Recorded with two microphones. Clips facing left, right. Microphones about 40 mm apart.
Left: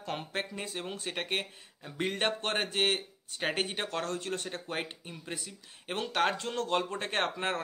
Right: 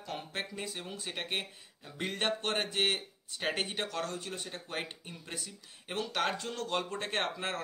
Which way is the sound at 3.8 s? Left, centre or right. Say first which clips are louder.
Left 3 dB; left.